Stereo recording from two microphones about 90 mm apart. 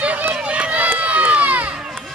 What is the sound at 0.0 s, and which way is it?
Run, 15° right (ahead or behind).